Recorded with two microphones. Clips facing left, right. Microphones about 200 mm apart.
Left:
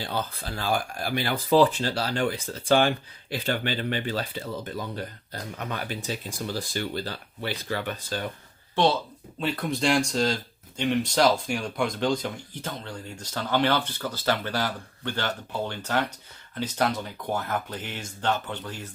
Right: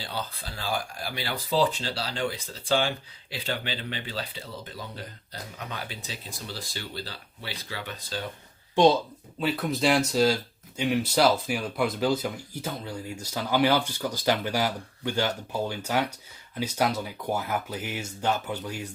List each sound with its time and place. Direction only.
0.0 s speech: 50° left (ahead or behind)
5.9 s speech: 50° left (ahead or behind)
8.7 s speech: 15° right (ahead or behind)
9.4 s speech: 5° right (ahead or behind)